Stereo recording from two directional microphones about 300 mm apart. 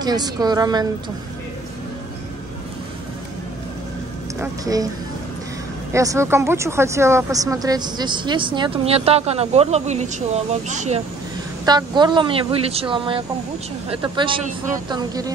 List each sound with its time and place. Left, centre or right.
0.0 s speech: centre
4.4 s speech: centre
5.9 s speech: centre